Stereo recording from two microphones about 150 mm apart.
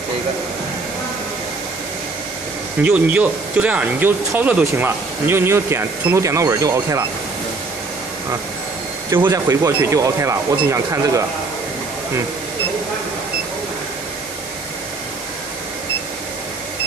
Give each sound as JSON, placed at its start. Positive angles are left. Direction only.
{"t": 2.8, "sound": "speech", "side_deg": -10}
{"t": 9.1, "sound": "speech", "side_deg": -20}